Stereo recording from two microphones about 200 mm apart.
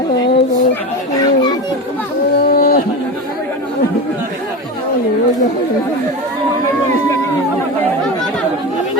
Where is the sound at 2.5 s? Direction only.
50° left (ahead or behind).